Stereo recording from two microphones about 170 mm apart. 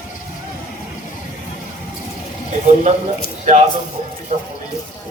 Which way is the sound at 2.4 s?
45° right (ahead or behind).